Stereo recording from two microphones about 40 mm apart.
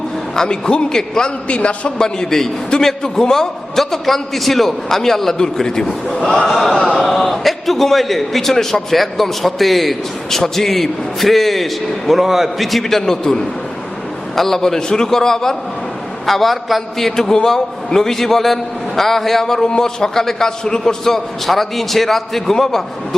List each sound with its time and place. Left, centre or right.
0.4 s a man's voice: left
1.5 s a man's voice: left
2.0 s a man's voice: centre
16.2 s a man's voice: centre